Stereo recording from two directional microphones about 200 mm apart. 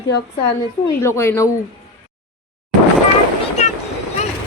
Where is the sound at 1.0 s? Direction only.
15° left (ahead or behind).